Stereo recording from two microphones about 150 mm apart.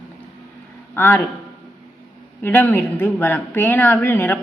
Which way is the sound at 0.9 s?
15° left (ahead or behind).